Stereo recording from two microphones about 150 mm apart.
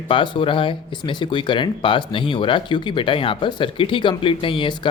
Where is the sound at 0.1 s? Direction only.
35° left (ahead or behind).